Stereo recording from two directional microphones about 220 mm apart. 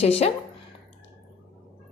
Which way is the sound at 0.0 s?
30° left (ahead or behind).